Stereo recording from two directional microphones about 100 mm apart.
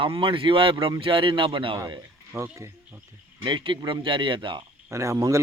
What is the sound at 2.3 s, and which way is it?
Speech, 30° right (ahead or behind).